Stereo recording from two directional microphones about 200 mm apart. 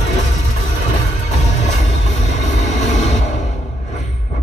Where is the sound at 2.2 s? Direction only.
35° left (ahead or behind).